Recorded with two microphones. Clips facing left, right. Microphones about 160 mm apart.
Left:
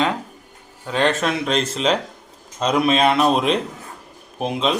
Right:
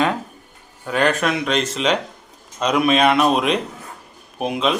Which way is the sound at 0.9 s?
25° left (ahead or behind).